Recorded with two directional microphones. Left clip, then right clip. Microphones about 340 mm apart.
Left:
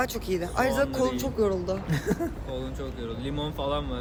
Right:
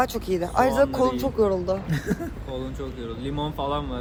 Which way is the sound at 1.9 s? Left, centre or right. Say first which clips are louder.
Even; left.